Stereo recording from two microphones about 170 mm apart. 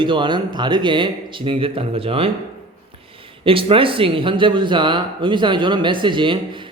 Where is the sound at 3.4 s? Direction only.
30° right (ahead or behind).